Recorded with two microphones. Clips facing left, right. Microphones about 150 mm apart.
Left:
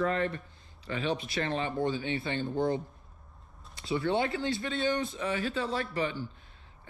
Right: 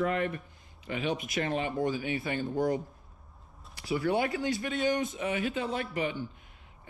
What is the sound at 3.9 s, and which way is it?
A man's voice, 25° left (ahead or behind).